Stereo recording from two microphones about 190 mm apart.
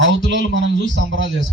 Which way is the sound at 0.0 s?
80° right.